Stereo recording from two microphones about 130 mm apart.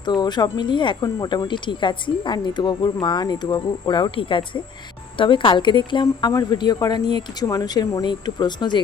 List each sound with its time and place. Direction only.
0.0 s speech: 35° left (ahead or behind)